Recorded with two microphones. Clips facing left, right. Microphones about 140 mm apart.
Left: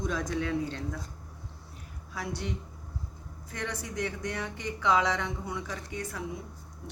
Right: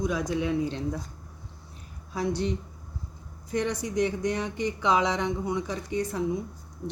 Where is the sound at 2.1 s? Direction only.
25° right (ahead or behind).